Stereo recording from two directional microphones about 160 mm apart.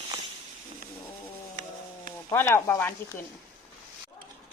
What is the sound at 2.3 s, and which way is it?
Speech, 15° left (ahead or behind).